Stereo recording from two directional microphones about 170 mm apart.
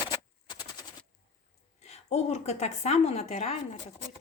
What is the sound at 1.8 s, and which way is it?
Speech, 40° left (ahead or behind).